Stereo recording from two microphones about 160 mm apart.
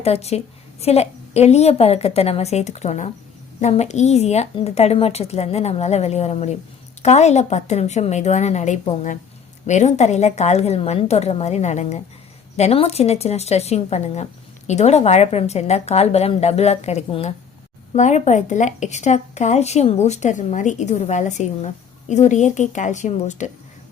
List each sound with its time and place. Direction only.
0.0 s a woman's voice: 40° left (ahead or behind)